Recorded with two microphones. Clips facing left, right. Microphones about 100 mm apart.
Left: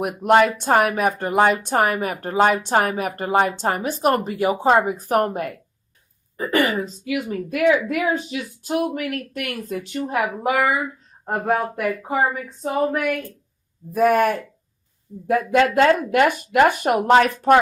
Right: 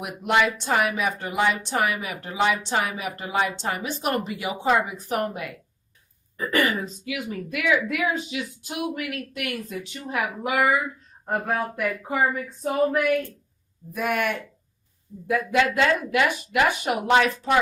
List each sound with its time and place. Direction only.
0.0 s speech: 45° left (ahead or behind)
11.4 s speech: 25° left (ahead or behind)
13.9 s speech: 40° left (ahead or behind)